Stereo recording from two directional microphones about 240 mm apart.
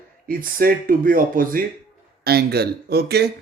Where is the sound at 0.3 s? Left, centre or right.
Right.